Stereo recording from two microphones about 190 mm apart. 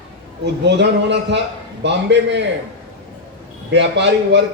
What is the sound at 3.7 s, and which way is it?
Speech, 65° right (ahead or behind).